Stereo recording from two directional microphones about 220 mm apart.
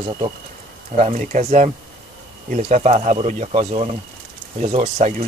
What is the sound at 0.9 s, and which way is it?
Speech, 35° right (ahead or behind).